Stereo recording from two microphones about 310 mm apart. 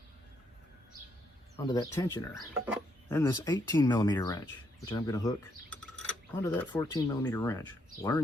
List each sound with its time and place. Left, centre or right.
1.5 s speech: centre